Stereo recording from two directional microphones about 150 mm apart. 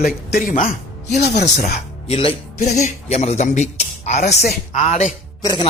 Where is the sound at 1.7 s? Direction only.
55° left (ahead or behind).